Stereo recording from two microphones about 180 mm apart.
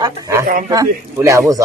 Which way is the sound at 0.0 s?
15° right (ahead or behind).